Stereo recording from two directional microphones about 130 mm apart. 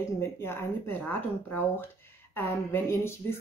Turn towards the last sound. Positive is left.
turn(degrees=20)  # may be behind; listen again after turning